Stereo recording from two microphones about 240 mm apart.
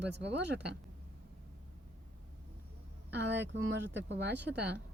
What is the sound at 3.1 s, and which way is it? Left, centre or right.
Speech, right.